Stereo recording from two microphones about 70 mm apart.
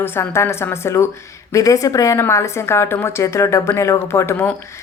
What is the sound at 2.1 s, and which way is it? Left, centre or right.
A woman's voice, left.